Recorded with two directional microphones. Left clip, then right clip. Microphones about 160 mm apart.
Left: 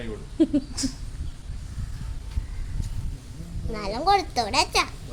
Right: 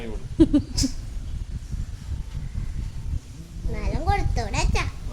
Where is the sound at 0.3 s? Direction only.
35° right (ahead or behind).